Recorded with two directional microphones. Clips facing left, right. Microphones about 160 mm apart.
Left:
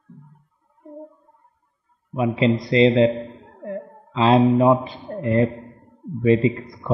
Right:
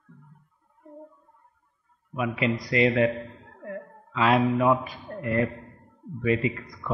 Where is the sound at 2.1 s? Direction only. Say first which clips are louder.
Left 7 dB; 25° left (ahead or behind).